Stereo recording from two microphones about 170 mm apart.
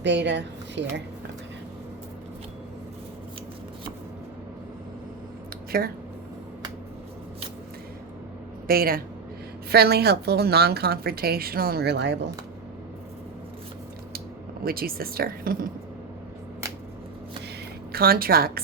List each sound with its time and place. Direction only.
0.0 s speech: 90° right
8.6 s a woman's voice: 60° right (ahead or behind); by 12.1 s 80° right
14.6 s a woman's voice: 60° right (ahead or behind)
17.9 s a woman's voice: 60° right (ahead or behind)